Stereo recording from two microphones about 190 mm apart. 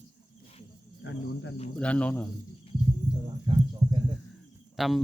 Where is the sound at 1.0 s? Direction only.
70° left (ahead or behind).